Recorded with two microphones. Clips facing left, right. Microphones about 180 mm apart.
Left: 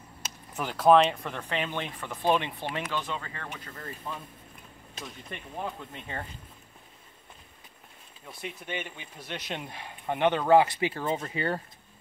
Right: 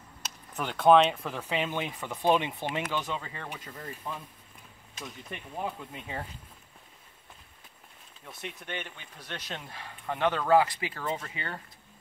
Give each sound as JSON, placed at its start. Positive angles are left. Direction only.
{"t": 0.6, "sound": "speech", "side_deg": 5}
{"t": 8.3, "sound": "speech", "side_deg": 0}